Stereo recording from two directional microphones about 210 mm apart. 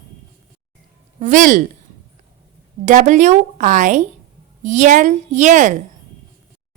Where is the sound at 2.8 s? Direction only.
35° right (ahead or behind).